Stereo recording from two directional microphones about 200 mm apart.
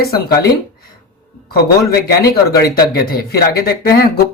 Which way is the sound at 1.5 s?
50° left (ahead or behind).